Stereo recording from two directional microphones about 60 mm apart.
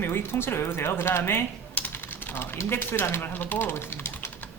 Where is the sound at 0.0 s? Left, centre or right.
Left.